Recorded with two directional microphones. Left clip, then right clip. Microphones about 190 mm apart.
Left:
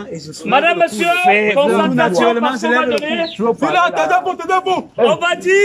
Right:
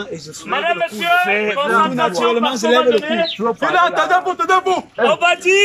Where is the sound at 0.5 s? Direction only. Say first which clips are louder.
Left 5 dB; 55° left (ahead or behind).